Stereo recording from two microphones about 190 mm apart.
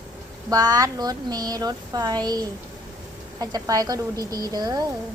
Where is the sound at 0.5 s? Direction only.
20° right (ahead or behind).